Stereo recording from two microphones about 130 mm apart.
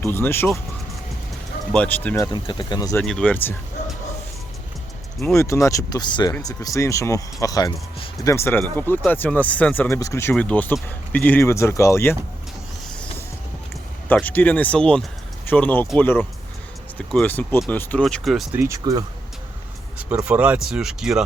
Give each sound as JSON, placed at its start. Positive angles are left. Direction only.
{"t": 0.0, "sound": "speech", "side_deg": 20}
{"t": 1.7, "sound": "speech", "side_deg": 10}
{"t": 2.1, "sound": "speech", "side_deg": 30}
{"t": 3.0, "sound": "speech", "side_deg": 10}
{"t": 5.2, "sound": "speech", "side_deg": 20}
{"t": 10.3, "sound": "speech", "side_deg": 10}
{"t": 14.1, "sound": "speech", "side_deg": 15}
{"t": 18.0, "sound": "speech", "side_deg": 0}
{"t": 18.5, "sound": "speech", "side_deg": -25}
{"t": 20.2, "sound": "speech", "side_deg": -10}